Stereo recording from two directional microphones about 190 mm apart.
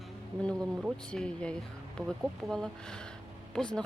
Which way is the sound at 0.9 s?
5° left (ahead or behind).